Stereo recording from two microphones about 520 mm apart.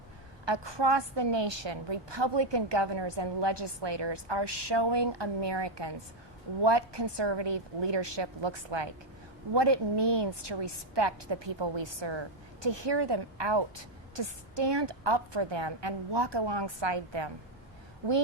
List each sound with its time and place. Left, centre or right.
0.4 s a woman's voice: right